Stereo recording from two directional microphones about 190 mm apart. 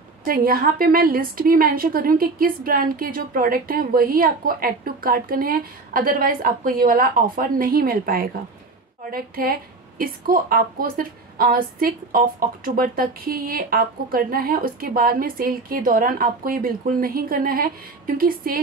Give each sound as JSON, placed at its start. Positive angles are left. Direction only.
{"t": 0.3, "sound": "a woman's voice", "side_deg": -50}